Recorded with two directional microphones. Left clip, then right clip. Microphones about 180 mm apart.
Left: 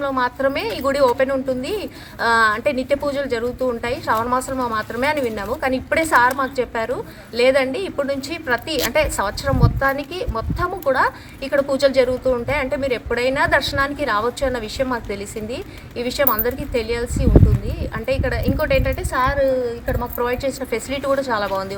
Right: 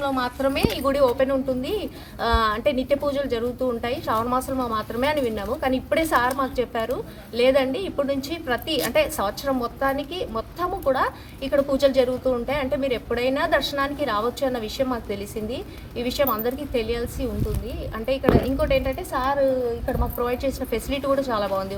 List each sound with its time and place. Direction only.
0.0 s a woman's voice: 40° left (ahead or behind)
0.8 s a woman's voice: 15° left (ahead or behind)